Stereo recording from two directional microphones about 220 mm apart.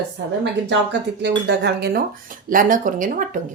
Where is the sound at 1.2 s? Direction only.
50° right (ahead or behind).